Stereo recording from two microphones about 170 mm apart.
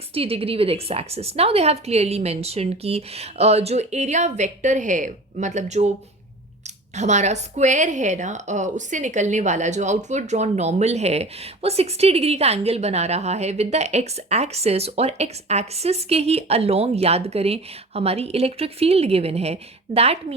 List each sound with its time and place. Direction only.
0.1 s a woman's voice: 35° right (ahead or behind)
6.9 s a woman's voice: 45° right (ahead or behind)